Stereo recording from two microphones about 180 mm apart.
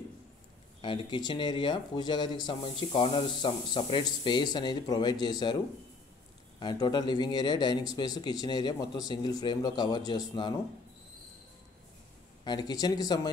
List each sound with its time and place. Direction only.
0.7 s speech: 30° left (ahead or behind)
6.6 s speech: 25° left (ahead or behind)
12.4 s speech: 25° left (ahead or behind)